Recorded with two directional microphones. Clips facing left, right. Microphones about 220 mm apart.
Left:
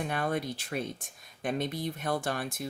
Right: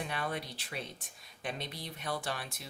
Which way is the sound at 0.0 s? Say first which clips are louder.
Left 6 dB; 50° left (ahead or behind).